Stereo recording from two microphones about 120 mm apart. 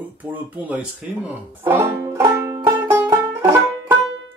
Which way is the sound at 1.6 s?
20° right (ahead or behind).